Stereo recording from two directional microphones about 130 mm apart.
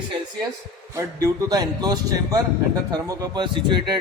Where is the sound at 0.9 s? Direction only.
30° right (ahead or behind).